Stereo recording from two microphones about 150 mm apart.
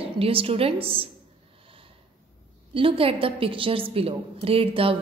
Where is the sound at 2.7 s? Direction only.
35° right (ahead or behind).